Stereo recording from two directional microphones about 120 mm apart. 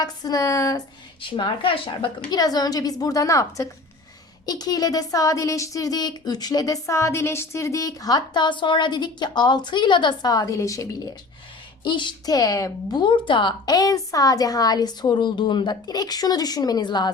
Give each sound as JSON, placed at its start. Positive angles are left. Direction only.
{"t": 0.0, "sound": "speech", "side_deg": 30}
{"t": 1.4, "sound": "speech", "side_deg": 45}
{"t": 11.8, "sound": "speech", "side_deg": 40}